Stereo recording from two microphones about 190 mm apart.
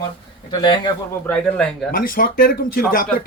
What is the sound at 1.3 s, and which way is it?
Speech, 5° left (ahead or behind).